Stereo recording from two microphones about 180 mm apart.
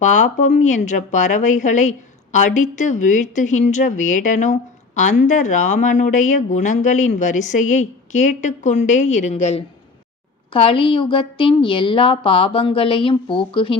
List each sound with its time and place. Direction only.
0.0 s a woman's voice: 40° left (ahead or behind)